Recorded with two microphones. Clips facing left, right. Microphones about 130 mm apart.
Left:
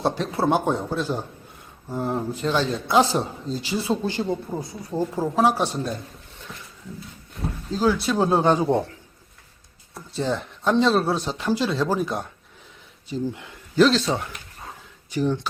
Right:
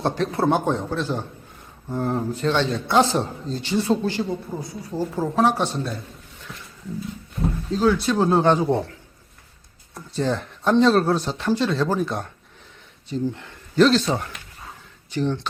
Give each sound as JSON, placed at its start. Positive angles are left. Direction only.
{"t": 0.0, "sound": "a man's voice", "side_deg": 5}
{"t": 4.1, "sound": "speech", "side_deg": 20}
{"t": 7.7, "sound": "a man's voice", "side_deg": 5}
{"t": 9.9, "sound": "speech", "side_deg": 0}